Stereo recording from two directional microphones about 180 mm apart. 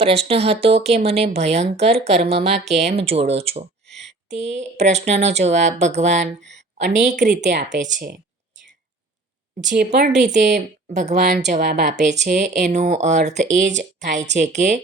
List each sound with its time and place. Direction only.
0.0 s speech: 35° right (ahead or behind)
3.8 s a sound: centre (ahead or behind)
4.3 s a woman's voice: 40° right (ahead or behind)
9.6 s a woman's voice: 45° right (ahead or behind)